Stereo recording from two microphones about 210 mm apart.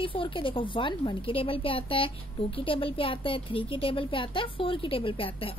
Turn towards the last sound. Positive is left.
turn(degrees=25)  # may be behind; listen again after turning